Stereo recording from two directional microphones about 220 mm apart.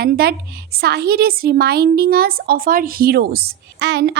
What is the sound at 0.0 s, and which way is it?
A woman's voice, 45° right (ahead or behind).